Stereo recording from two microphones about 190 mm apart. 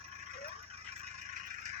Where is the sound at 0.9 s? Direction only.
35° right (ahead or behind).